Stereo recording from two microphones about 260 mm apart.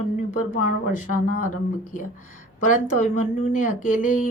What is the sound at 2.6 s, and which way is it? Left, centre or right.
Speech, left.